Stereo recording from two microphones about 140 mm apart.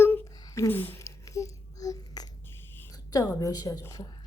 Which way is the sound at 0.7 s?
15° left (ahead or behind).